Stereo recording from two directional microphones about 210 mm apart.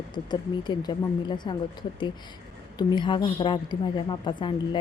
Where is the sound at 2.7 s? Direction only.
20° left (ahead or behind).